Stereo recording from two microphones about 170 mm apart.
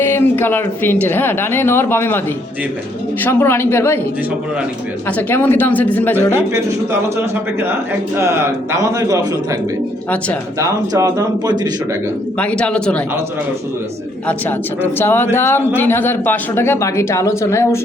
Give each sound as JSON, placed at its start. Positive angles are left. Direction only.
{"t": 0.0, "sound": "a woman's voice", "side_deg": 15}
{"t": 3.2, "sound": "a woman's voice", "side_deg": 10}
{"t": 5.0, "sound": "a woman's voice", "side_deg": 10}
{"t": 8.2, "sound": "speech", "side_deg": -15}
{"t": 10.6, "sound": "speech", "side_deg": -20}
{"t": 12.4, "sound": "a woman's voice", "side_deg": 5}
{"t": 14.8, "sound": "a woman's voice", "side_deg": 15}